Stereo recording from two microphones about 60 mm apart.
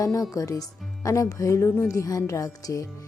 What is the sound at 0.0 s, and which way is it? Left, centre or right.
Speech, left.